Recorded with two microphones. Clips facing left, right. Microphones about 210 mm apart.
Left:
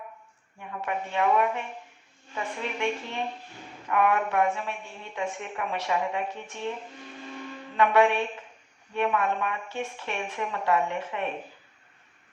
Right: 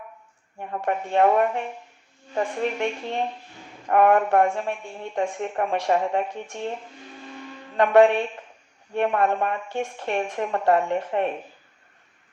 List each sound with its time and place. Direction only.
0.6 s a woman's voice: 50° right (ahead or behind)
7.8 s a woman's voice: 50° right (ahead or behind)